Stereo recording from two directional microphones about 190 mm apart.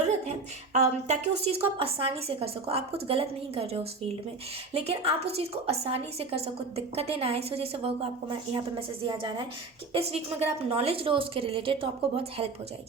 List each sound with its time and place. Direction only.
0.0 s a woman's voice: 35° right (ahead or behind)